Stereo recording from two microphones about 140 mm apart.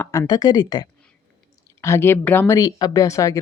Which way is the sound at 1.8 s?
15° left (ahead or behind).